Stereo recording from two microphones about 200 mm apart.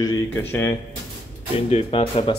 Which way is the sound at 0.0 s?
10° left (ahead or behind).